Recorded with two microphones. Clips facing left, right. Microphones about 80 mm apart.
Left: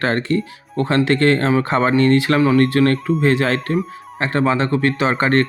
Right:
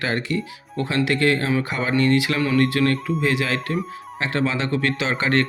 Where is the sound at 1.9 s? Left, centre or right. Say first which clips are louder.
Left 2 dB; left.